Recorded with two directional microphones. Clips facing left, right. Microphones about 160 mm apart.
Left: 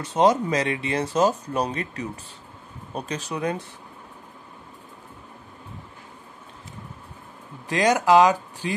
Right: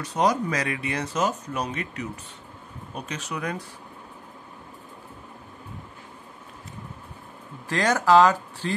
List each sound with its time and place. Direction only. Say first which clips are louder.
0.0 s speech: left 4 dB; 25° left (ahead or behind)
7.6 s speech: left 2 dB; 15° left (ahead or behind)